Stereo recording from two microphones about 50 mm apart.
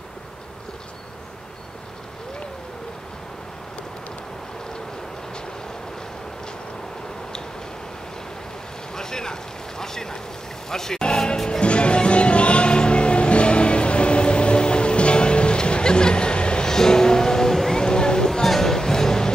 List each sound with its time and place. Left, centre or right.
8.9 s boat: centre
10.7 s music: centre